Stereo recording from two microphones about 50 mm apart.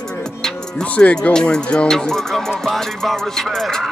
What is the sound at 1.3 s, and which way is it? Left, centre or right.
Music, centre.